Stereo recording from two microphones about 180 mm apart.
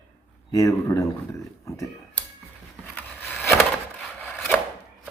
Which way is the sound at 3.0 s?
10° left (ahead or behind).